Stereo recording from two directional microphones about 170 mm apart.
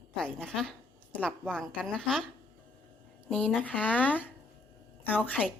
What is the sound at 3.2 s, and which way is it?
A woman's voice, 5° left (ahead or behind).